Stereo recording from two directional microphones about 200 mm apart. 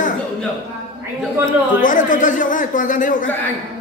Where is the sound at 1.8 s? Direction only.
40° left (ahead or behind).